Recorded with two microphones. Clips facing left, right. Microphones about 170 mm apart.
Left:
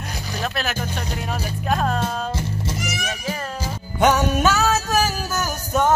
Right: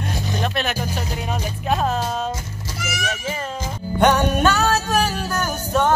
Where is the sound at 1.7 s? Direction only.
Centre (ahead or behind).